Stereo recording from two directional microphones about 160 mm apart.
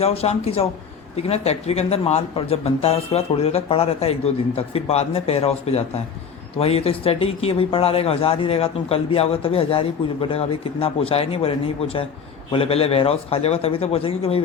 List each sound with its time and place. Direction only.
0.0 s speech: 40° left (ahead or behind)